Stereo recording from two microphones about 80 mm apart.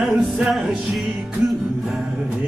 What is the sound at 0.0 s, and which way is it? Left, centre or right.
Music, centre.